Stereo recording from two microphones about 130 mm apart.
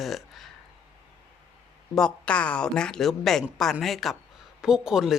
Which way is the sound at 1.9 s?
5° left (ahead or behind).